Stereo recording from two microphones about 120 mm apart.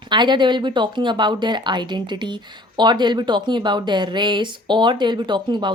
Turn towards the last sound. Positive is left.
turn(degrees=-40)  # may be behind; listen again after turning